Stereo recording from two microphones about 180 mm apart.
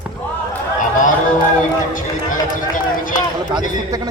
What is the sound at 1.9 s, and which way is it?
Speech, 45° left (ahead or behind).